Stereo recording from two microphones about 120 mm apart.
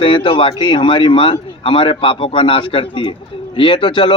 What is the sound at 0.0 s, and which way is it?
Speech, 45° left (ahead or behind).